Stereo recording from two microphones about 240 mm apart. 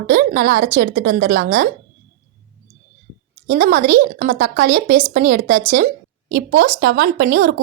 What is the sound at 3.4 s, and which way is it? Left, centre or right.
Speech, right.